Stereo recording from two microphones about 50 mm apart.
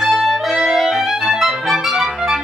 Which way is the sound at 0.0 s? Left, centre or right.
Centre.